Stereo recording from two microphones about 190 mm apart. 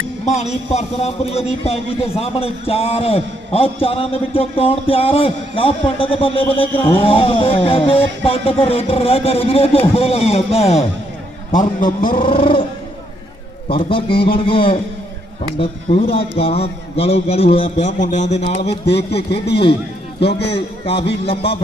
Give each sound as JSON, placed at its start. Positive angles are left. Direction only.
{"t": 0.3, "sound": "a man's voice", "side_deg": 35}
{"t": 12.2, "sound": "a man's voice", "side_deg": 25}
{"t": 13.7, "sound": "a man's voice", "side_deg": 30}
{"t": 20.1, "sound": "a man's voice", "side_deg": 60}
{"t": 20.5, "sound": "a man's voice", "side_deg": 30}